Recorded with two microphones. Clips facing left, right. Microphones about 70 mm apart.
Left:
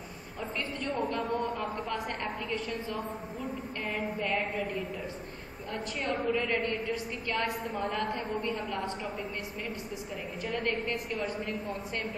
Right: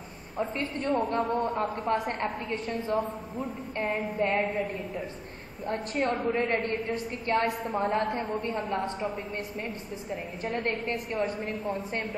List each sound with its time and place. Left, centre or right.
0.4 s a woman's voice: right
4.2 s a woman's voice: right
5.7 s a woman's voice: right
10.4 s a woman's voice: right